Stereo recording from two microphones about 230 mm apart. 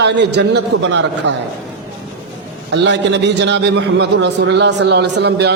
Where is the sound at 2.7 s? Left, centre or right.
Right.